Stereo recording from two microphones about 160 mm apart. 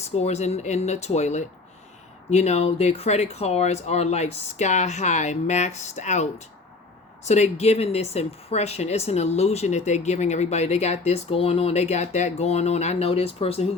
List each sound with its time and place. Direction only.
0.0 s speech: 45° left (ahead or behind)
7.3 s speech: 45° left (ahead or behind)